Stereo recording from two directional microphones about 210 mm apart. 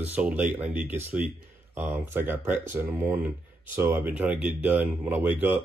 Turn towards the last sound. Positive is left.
turn(degrees=-10)  # may be behind; listen again after turning